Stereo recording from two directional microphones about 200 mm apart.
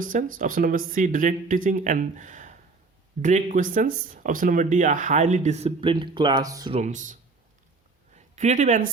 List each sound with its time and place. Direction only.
0.0 s speech: 45° right (ahead or behind); by 6.7 s 20° right (ahead or behind)
6.7 s speech: 40° right (ahead or behind)
8.1 s a sound: 35° right (ahead or behind)